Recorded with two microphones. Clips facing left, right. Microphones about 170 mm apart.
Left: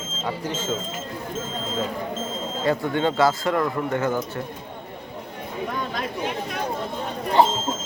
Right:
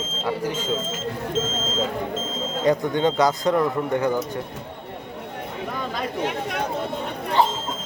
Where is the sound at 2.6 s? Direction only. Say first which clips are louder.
Right 2 dB; 20° right (ahead or behind).